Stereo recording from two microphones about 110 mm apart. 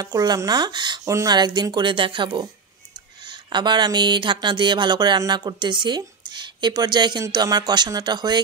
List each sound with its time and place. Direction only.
0.0 s speech: 35° right (ahead or behind)